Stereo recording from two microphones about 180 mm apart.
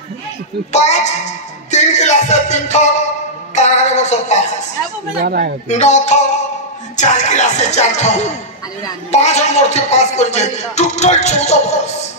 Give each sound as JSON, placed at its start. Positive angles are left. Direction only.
{"t": 0.7, "sound": "speech", "side_deg": 40}
{"t": 5.2, "sound": "speech", "side_deg": -55}
{"t": 5.7, "sound": "speech", "side_deg": 40}